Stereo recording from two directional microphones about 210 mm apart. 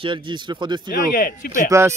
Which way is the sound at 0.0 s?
25° right (ahead or behind).